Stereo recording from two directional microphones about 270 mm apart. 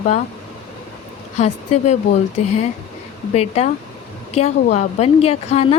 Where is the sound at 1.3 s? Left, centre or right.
Left.